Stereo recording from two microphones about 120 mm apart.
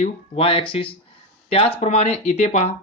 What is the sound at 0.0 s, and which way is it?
Speech, 55° left (ahead or behind).